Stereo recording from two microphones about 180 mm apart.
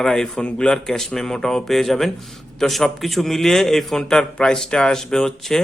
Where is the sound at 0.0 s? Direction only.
5° left (ahead or behind).